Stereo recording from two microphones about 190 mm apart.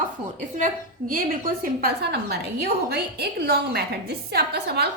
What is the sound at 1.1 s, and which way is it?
A woman's voice, 45° right (ahead or behind).